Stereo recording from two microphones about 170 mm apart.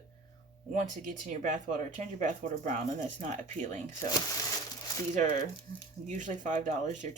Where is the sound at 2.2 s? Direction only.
50° right (ahead or behind).